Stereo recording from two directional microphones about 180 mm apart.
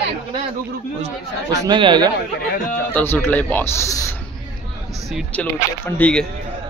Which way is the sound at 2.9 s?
10° left (ahead or behind).